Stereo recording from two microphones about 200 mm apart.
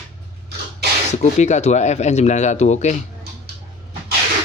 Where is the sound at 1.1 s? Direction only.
35° left (ahead or behind).